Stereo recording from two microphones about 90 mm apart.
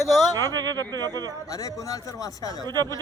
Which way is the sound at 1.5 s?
40° left (ahead or behind).